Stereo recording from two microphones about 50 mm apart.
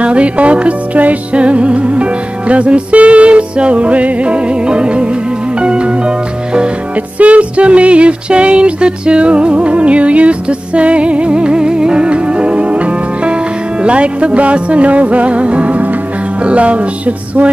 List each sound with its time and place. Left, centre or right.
0.0 s music: right